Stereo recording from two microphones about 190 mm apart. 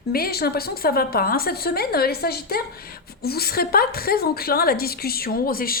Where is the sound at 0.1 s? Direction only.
55° left (ahead or behind).